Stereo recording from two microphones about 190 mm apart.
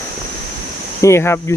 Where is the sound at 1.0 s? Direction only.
15° left (ahead or behind).